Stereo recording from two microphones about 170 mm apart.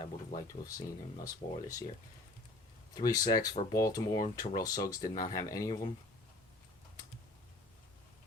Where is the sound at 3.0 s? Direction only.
20° left (ahead or behind).